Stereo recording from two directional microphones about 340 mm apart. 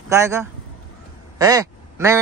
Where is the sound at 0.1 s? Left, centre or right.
Centre.